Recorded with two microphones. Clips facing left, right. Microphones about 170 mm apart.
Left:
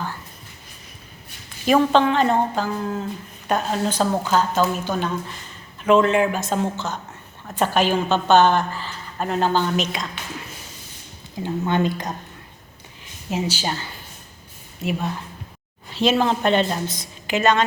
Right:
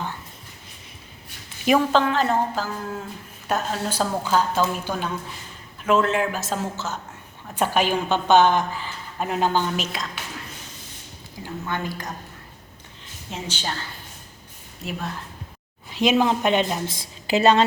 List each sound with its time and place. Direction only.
1.6 s a woman's voice: 5° right (ahead or behind)
11.4 s speech: 20° left (ahead or behind)
13.3 s a woman's voice: 10° left (ahead or behind)
15.9 s a woman's voice: 15° right (ahead or behind)
16.9 s a woman's voice: 30° right (ahead or behind)